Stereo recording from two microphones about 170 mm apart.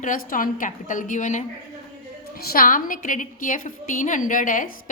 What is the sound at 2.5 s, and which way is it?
A woman's voice, 55° left (ahead or behind).